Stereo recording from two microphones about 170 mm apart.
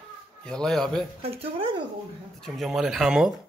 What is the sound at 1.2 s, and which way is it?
Speech, 35° right (ahead or behind).